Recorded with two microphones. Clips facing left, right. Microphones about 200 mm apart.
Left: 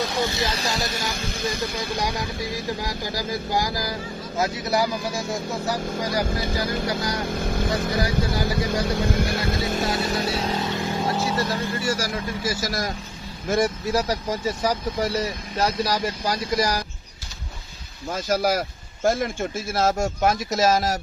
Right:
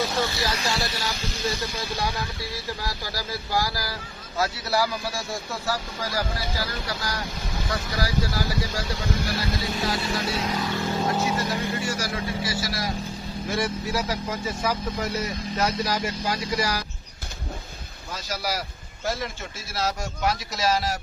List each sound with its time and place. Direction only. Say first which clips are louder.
0.2 s speech: left 2 dB; 20° left (ahead or behind)
0.5 s speech: left 1 dB; 40° left (ahead or behind); by 2.0 s 55° left (ahead or behind)
2.0 s speech: left 2 dB; 15° left (ahead or behind)
6.3 s speech: left 5 dB; 50° left (ahead or behind)
6.8 s speech: left 6 dB; 20° left (ahead or behind)
7.2 s speech: left 7 dB; 50° left (ahead or behind)
10.0 s speech: left 3 dB; 35° left (ahead or behind); by 11.2 s 10° left (ahead or behind)
11.2 s speech: left 1 dB; 10° right (ahead or behind)
11.9 s speech: left 3 dB; 40° left (ahead or behind)
18.1 s speech: left 8 dB; 50° left (ahead or behind)